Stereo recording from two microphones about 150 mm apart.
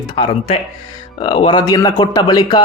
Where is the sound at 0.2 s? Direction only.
40° left (ahead or behind).